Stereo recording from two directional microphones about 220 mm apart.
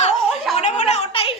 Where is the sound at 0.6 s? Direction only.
30° left (ahead or behind).